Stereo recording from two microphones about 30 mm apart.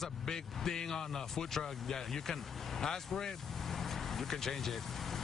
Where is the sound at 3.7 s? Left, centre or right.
Centre.